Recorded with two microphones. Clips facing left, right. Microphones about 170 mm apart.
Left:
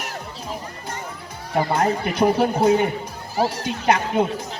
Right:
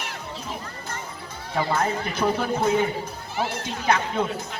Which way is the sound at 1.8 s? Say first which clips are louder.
Left 5 dB; 35° left (ahead or behind).